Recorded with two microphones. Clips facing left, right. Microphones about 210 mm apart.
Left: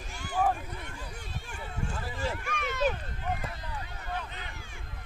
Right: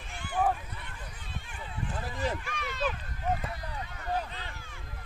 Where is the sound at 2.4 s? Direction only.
50° left (ahead or behind).